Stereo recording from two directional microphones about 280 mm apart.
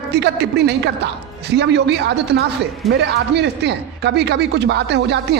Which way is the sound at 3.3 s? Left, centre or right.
Right.